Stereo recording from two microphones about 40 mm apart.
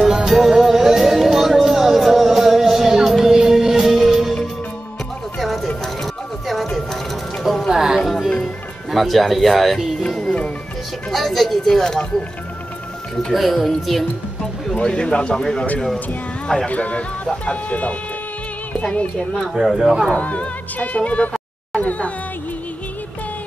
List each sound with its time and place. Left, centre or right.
0.0 s music: centre
5.4 s music: centre
7.7 s a sound: centre
8.9 s speech: centre
10.0 s music: centre
13.3 s speech: centre
14.8 s speech: left
16.6 s speech: left
19.8 s speech: centre
20.1 s speech: left
21.7 s music: left